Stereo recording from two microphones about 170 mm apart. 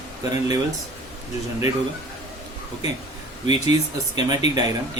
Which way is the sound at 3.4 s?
40° left (ahead or behind).